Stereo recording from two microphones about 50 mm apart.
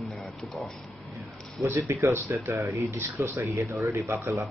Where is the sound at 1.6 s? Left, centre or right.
Right.